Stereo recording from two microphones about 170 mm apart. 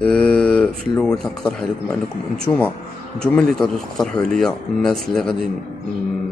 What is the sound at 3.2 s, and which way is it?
Speech, 5° left (ahead or behind).